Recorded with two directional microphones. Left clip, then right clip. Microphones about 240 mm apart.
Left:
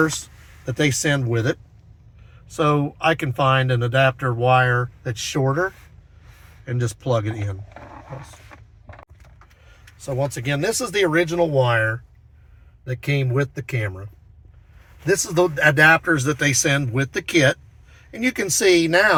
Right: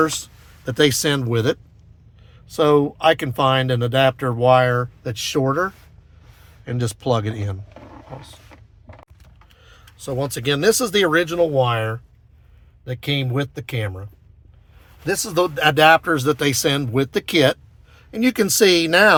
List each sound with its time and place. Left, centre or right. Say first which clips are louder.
0.6 s speech: right 4 dB; right
10.2 s speech: right 2 dB; right
15.5 s speech: right 2 dB; right